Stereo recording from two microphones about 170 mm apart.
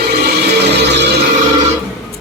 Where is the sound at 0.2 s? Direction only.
75° right (ahead or behind).